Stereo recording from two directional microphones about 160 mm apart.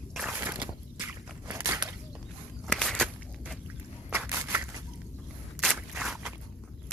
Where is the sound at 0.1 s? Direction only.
Centre (ahead or behind).